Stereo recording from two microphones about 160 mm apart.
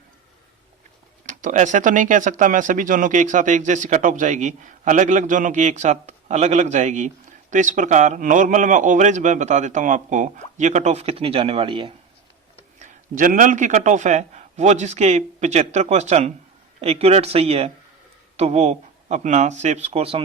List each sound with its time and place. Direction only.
1.3 s speech: 55° right (ahead or behind); by 11.9 s 35° right (ahead or behind)
12.8 s speech: 55° right (ahead or behind); by 20.2 s 35° right (ahead or behind)